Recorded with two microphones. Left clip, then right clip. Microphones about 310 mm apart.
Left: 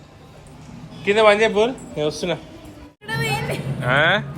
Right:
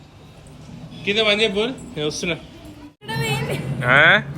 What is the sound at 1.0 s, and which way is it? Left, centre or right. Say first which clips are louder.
Speech: left 4 dB; centre.